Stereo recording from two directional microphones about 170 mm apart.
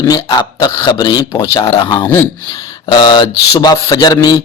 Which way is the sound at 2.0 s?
15° left (ahead or behind).